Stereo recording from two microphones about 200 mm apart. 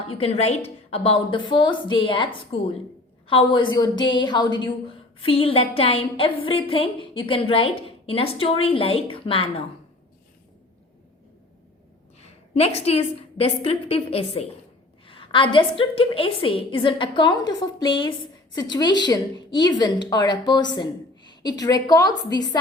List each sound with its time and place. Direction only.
0.2 s a woman's voice: 30° left (ahead or behind)
12.2 s a woman's voice: 30° left (ahead or behind)